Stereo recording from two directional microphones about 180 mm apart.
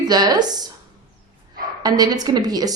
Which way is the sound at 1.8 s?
20° right (ahead or behind).